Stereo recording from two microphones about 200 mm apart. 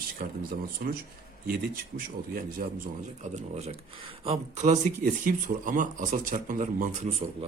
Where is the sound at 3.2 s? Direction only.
35° right (ahead or behind).